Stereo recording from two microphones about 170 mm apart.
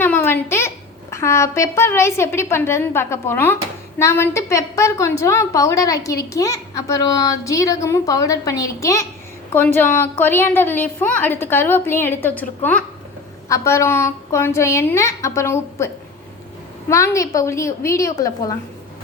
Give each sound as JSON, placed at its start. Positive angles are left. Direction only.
{"t": 0.0, "sound": "a sound", "side_deg": 10}
{"t": 1.1, "sound": "a woman's voice", "side_deg": 15}
{"t": 16.9, "sound": "a woman's voice", "side_deg": 20}